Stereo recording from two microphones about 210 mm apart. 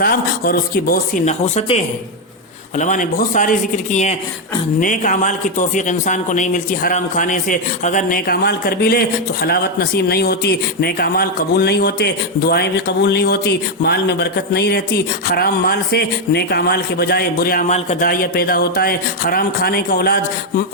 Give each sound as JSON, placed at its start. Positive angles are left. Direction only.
{"t": 0.0, "sound": "speech", "side_deg": 45}
{"t": 4.8, "sound": "speech", "side_deg": 40}